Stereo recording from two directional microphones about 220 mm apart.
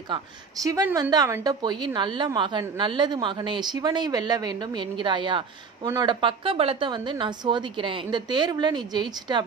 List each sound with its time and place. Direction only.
0.1 s speech: 15° right (ahead or behind)